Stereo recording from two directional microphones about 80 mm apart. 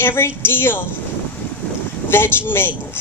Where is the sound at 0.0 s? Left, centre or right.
Left.